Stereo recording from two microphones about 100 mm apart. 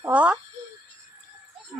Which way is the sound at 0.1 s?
15° right (ahead or behind).